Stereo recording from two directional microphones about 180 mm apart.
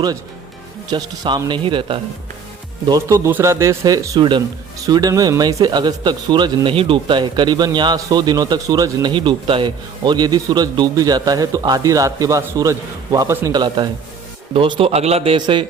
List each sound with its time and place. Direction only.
0.9 s a man's voice: 25° right (ahead or behind)